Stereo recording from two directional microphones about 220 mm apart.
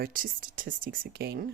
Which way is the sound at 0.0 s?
40° right (ahead or behind).